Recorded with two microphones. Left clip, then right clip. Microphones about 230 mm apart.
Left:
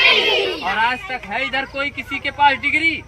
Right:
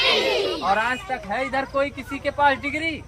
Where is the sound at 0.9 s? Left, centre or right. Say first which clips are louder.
Left 3 dB; centre.